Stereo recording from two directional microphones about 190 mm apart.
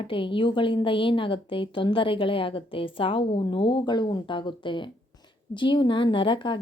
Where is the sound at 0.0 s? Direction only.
25° left (ahead or behind).